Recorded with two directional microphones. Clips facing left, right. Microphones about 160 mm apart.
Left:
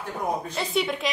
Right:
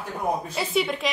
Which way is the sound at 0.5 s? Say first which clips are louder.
Right 1 dB; centre (ahead or behind).